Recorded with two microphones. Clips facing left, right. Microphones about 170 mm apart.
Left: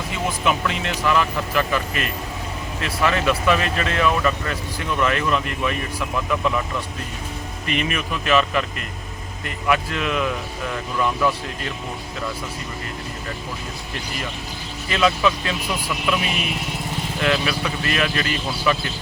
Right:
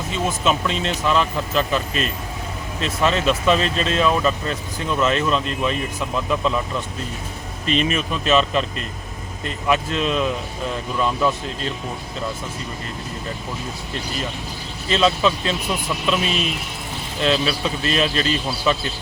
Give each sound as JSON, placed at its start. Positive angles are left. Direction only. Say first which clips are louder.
{"t": 0.1, "sound": "speech", "louder": "right 2 dB", "side_deg": -25}
{"t": 7.7, "sound": "speech", "louder": "right 3 dB", "side_deg": -25}
{"t": 9.6, "sound": "speech", "louder": "right 1 dB", "side_deg": -25}
{"t": 14.8, "sound": "speech", "louder": "right 1 dB", "side_deg": -25}